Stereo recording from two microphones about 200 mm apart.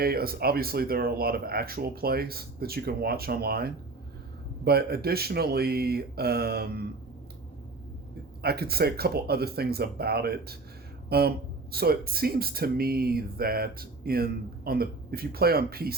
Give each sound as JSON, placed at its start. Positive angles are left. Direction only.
{"t": 0.0, "sound": "speech", "side_deg": -50}
{"t": 8.4, "sound": "speech", "side_deg": -50}